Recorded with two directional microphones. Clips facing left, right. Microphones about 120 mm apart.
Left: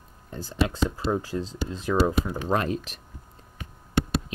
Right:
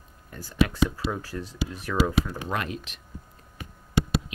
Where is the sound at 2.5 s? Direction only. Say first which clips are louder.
Left 5 dB; 35° left (ahead or behind).